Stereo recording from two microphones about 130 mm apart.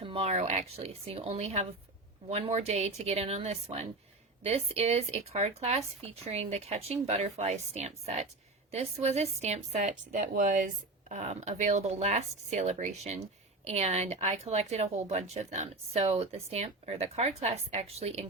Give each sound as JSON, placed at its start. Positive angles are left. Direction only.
{"t": 0.0, "sound": "speech", "side_deg": -45}
{"t": 11.1, "sound": "speech", "side_deg": -60}